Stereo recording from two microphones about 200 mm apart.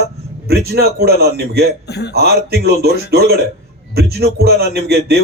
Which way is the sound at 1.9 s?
55° left (ahead or behind).